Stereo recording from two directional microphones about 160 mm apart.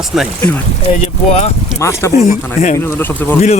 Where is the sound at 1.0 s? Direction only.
40° left (ahead or behind).